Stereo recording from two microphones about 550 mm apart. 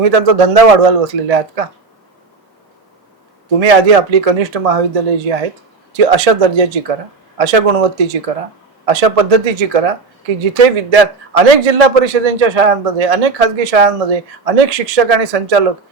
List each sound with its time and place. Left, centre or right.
0.0 s a man's voice: right
3.6 s a man's voice: right